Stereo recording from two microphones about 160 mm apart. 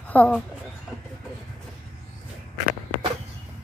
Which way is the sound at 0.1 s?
10° left (ahead or behind).